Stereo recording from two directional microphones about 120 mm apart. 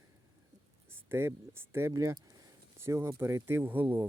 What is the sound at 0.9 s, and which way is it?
Speech, 20° right (ahead or behind).